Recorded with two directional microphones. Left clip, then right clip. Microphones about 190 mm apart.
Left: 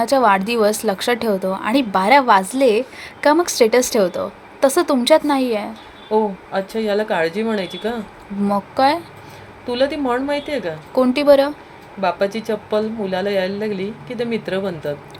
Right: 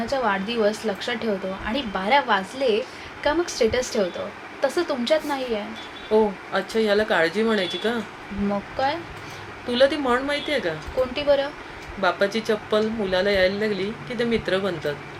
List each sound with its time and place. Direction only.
0.0 s a woman's voice: 55° left (ahead or behind)
6.1 s speech: 25° left (ahead or behind)
8.4 s speech: 55° left (ahead or behind)
9.6 s speech: 25° left (ahead or behind)
10.9 s speech: 55° left (ahead or behind)
11.9 s speech: 25° left (ahead or behind)